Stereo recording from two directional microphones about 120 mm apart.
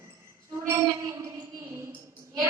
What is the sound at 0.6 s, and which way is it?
A woman's voice, 25° right (ahead or behind).